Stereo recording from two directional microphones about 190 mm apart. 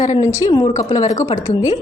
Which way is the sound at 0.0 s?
15° left (ahead or behind).